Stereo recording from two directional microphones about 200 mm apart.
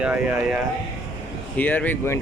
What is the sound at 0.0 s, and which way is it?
Speech, 5° right (ahead or behind).